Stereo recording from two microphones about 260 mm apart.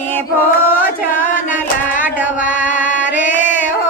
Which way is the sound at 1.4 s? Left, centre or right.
Left.